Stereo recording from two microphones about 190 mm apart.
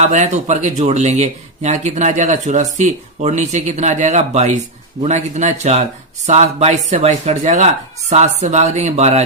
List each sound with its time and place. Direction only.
0.0 s speech: 35° right (ahead or behind)